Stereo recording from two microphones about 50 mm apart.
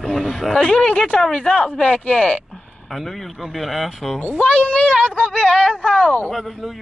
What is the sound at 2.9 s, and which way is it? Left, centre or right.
Speech, centre.